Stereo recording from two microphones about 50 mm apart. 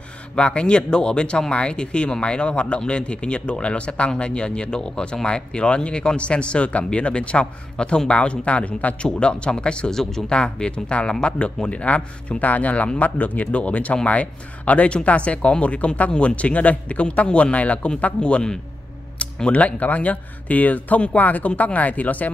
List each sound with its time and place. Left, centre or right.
0.4 s speech: left